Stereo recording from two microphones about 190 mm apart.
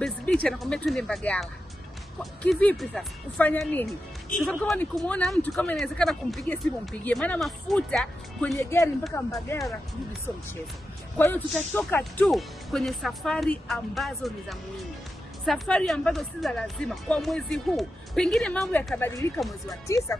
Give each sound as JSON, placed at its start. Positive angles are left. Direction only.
{"t": 0.0, "sound": "speech", "side_deg": 5}
{"t": 8.5, "sound": "speech", "side_deg": 15}
{"t": 9.5, "sound": "speech", "side_deg": 15}
{"t": 11.1, "sound": "speech", "side_deg": 10}